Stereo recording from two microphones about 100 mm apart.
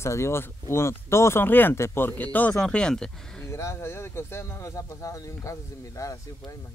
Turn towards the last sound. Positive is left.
turn(degrees=40)  # may be behind; listen again after turning